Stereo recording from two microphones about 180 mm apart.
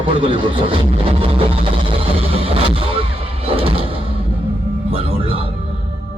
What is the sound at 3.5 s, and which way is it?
Music, 30° right (ahead or behind).